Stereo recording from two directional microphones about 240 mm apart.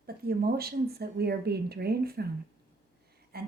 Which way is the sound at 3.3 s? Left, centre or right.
Right.